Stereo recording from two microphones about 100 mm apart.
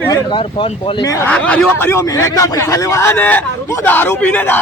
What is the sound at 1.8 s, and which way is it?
A man's voice, 30° left (ahead or behind).